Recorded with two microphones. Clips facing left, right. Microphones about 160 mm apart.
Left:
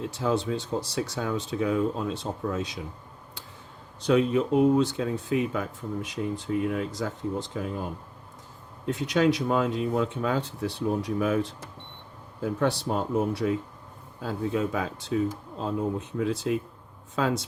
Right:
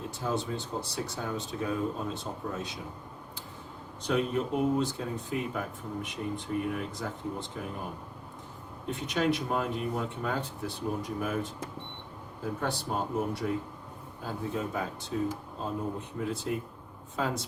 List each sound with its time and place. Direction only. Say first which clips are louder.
0.0 s speech: left 6 dB; 90° left
4.0 s speech: left 6 dB; 90° left
8.9 s speech: left 5 dB; 90° left
12.5 s speech: left 6 dB; 85° left